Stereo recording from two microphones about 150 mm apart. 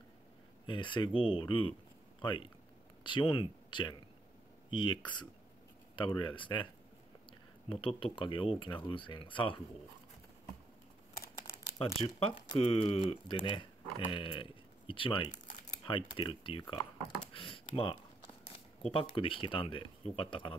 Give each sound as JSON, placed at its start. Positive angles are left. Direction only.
{"t": 0.7, "sound": "speech", "side_deg": 30}
{"t": 7.7, "sound": "speech", "side_deg": 35}
{"t": 11.8, "sound": "speech", "side_deg": 35}